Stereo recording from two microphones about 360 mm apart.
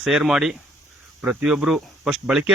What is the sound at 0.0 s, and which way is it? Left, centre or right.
Speech, centre.